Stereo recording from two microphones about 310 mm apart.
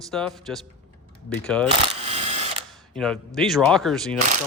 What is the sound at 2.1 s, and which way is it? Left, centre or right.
Mechanisms, right.